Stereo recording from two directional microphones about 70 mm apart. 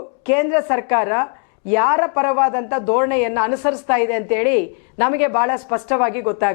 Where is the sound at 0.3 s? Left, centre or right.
Left.